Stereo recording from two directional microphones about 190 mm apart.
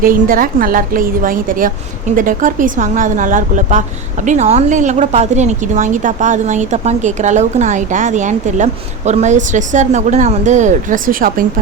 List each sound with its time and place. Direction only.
0.0 s a woman's voice: 50° right (ahead or behind)